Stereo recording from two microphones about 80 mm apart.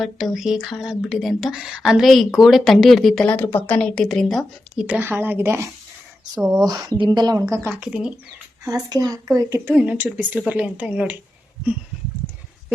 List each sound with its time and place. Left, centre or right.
0.0 s speech: centre
3.2 s speech: left
3.8 s speech: centre
4.9 s a woman's voice: right
6.6 s speech: right
7.7 s speech: centre
8.6 s speech: right
9.8 s a woman's voice: centre